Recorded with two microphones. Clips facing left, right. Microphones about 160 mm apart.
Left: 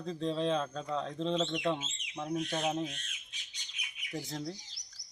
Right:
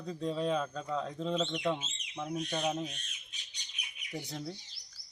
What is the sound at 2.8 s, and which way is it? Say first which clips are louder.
Bird: left 2 dB; 90° left.